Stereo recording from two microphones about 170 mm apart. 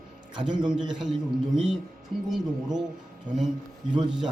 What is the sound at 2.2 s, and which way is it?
Speech, centre (ahead or behind).